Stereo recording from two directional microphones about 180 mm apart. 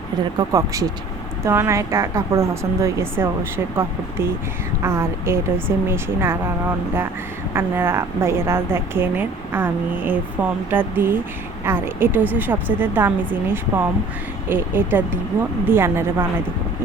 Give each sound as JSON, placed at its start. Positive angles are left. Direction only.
{"t": 0.3, "sound": "a woman's voice", "side_deg": -20}
{"t": 4.8, "sound": "a woman's voice", "side_deg": -15}
{"t": 7.5, "sound": "a woman's voice", "side_deg": -15}